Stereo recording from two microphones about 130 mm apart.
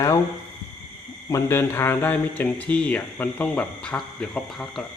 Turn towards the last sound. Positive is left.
turn(degrees=5)  # may be behind; listen again after turning